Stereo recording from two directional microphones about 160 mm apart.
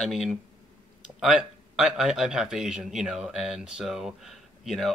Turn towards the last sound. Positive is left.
turn(degrees=0)  # may be behind; listen again after turning